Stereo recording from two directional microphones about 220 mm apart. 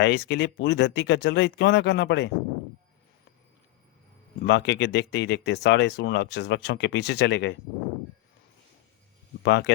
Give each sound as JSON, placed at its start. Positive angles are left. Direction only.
{"t": 0.0, "sound": "speech", "side_deg": 50}
{"t": 4.4, "sound": "speech", "side_deg": 55}
{"t": 9.4, "sound": "speech", "side_deg": 55}